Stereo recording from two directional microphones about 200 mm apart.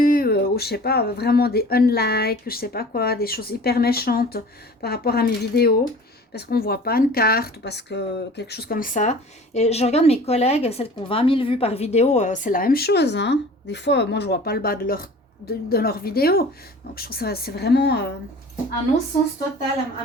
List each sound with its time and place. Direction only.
0.0 s speech: 45° left (ahead or behind)